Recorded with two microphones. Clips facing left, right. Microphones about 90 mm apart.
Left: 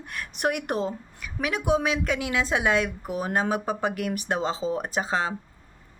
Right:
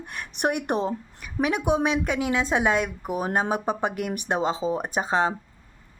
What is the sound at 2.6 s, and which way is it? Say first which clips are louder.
Speech: right 1 dB; 20° right (ahead or behind).